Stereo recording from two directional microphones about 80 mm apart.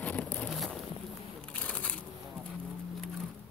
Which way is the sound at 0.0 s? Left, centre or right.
Centre.